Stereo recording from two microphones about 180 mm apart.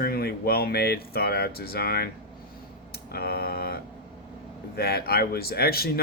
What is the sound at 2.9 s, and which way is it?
Music, 60° left (ahead or behind).